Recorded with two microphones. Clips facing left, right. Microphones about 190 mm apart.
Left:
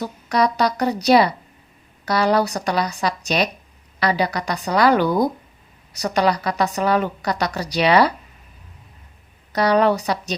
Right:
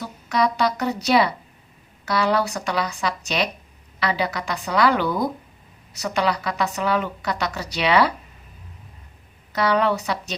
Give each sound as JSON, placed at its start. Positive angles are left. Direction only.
{"t": 0.0, "sound": "a woman's voice", "side_deg": 40}
{"t": 9.5, "sound": "a woman's voice", "side_deg": 40}